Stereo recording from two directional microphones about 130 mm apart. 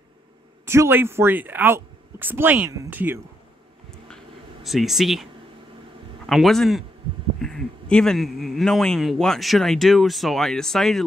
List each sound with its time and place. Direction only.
0.7 s speech: 20° right (ahead or behind)
4.6 s speech: centre (ahead or behind)